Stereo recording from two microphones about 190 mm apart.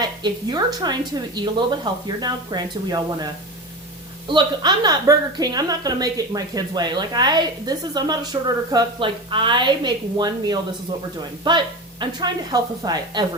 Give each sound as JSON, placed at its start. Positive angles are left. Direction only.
{"t": 0.0, "sound": "a woman's voice", "side_deg": -20}
{"t": 4.3, "sound": "a woman's voice", "side_deg": -25}